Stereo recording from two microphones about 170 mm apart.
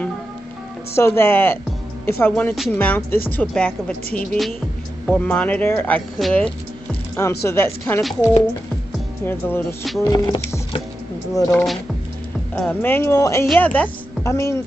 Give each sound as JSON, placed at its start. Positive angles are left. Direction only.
{"t": 0.9, "sound": "speech", "side_deg": 15}
{"t": 8.0, "sound": "speech", "side_deg": 0}
{"t": 9.2, "sound": "speech", "side_deg": 10}
{"t": 11.5, "sound": "speech", "side_deg": 0}
{"t": 12.5, "sound": "a woman's voice", "side_deg": 10}